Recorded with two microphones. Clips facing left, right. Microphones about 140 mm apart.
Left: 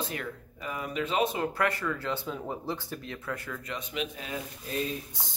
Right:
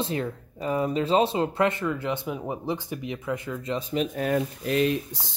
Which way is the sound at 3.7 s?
35° right (ahead or behind).